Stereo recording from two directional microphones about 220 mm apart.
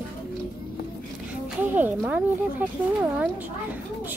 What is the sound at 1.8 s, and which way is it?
Speech, 10° right (ahead or behind).